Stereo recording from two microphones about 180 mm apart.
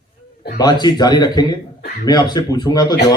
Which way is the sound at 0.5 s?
25° left (ahead or behind).